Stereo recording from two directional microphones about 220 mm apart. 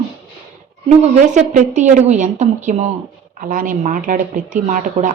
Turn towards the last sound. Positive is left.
turn(degrees=-35)  # may be behind; listen again after turning